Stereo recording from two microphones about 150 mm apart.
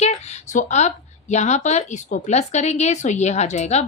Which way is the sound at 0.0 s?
50° left (ahead or behind).